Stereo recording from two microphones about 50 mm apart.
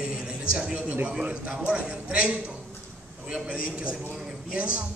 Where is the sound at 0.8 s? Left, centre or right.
Right.